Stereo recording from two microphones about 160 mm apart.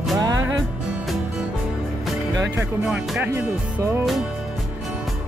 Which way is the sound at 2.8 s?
5° right (ahead or behind).